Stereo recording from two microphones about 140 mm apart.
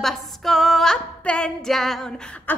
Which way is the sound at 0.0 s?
Centre (ahead or behind).